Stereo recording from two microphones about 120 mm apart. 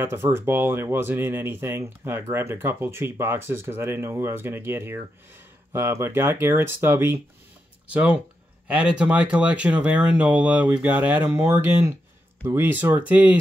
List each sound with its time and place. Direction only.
0.0 s speech: 20° right (ahead or behind)